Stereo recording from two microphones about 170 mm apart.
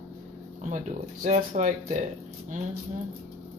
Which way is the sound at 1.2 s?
45° right (ahead or behind).